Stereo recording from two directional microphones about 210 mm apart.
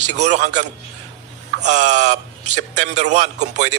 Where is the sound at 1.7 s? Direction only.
35° right (ahead or behind).